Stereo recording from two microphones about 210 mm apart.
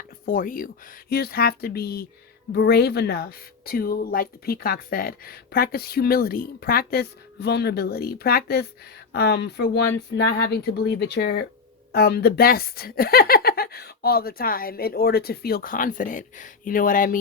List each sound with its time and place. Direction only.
0.3 s speech: 40° left (ahead or behind)